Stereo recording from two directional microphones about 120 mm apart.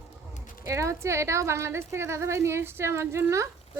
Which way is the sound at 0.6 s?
25° right (ahead or behind).